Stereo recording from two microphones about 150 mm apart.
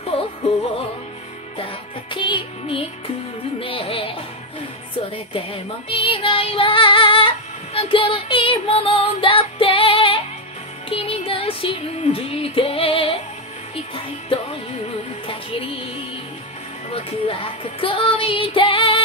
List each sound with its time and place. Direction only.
1.6 s music: 30° left (ahead or behind)
5.1 s female singing: 35° left (ahead or behind)
10.9 s music: 40° left (ahead or behind)
16.9 s music: 35° left (ahead or behind)